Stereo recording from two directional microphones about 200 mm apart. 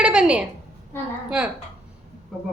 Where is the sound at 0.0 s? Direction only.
5° right (ahead or behind).